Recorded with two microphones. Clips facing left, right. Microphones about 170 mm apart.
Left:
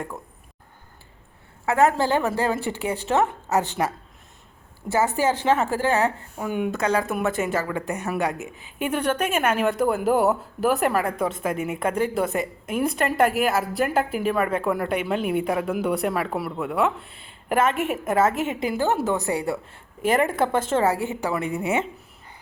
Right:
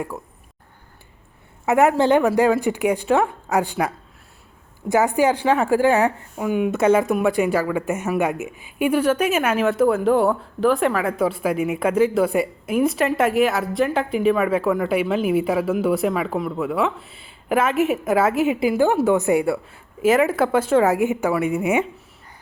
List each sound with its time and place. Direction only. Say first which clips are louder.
1.6 s a woman's voice: right 4 dB; 15° right (ahead or behind)
4.9 s a woman's voice: right 4 dB; 15° right (ahead or behind)
6.7 s speech: right 8 dB; 25° right (ahead or behind)
7.2 s a woman's voice: right 5 dB; 10° right (ahead or behind)